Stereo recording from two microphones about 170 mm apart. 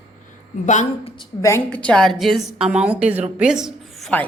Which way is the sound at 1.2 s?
15° left (ahead or behind).